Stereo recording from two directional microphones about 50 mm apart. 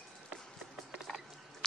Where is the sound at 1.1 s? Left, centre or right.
Centre.